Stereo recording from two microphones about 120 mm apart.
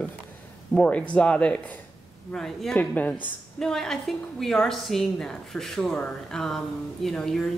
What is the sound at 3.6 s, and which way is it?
A woman's voice, 5° left (ahead or behind).